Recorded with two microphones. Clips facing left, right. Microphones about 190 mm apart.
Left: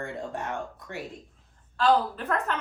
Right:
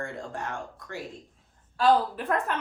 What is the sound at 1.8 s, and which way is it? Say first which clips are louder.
Speech: right 1 dB; 10° right (ahead or behind).